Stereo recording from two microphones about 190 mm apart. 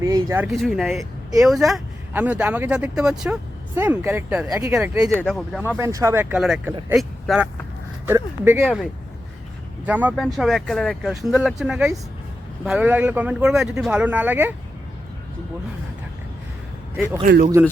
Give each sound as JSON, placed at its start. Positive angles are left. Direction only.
{"t": 0.0, "sound": "speech", "side_deg": -15}
{"t": 0.4, "sound": "speech", "side_deg": 0}
{"t": 4.8, "sound": "speech", "side_deg": -5}
{"t": 5.7, "sound": "speech", "side_deg": -15}
{"t": 8.0, "sound": "speech", "side_deg": -10}
{"t": 8.6, "sound": "speech", "side_deg": 0}
{"t": 17.2, "sound": "speech", "side_deg": -50}